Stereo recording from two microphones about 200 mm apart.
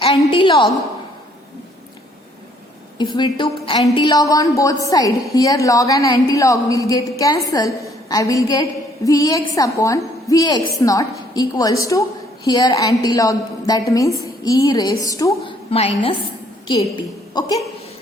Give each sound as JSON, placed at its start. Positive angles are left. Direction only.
{"t": 0.0, "sound": "a woman's voice", "side_deg": 25}
{"t": 3.0, "sound": "a woman's voice", "side_deg": 25}
{"t": 15.7, "sound": "a woman's voice", "side_deg": 30}